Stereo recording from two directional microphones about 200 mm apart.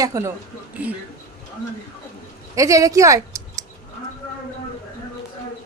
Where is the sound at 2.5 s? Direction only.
15° right (ahead or behind).